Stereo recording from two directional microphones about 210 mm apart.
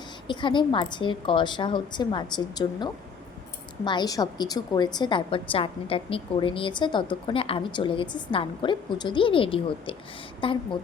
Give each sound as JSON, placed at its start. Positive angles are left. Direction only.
{"t": 0.3, "sound": "a woman's voice", "side_deg": 20}